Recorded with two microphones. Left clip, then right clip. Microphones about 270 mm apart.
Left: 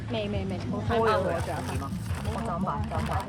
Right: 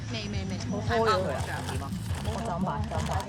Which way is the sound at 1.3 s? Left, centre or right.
Right.